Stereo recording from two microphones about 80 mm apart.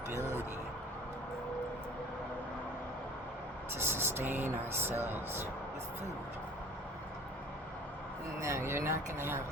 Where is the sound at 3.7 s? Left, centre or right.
Right.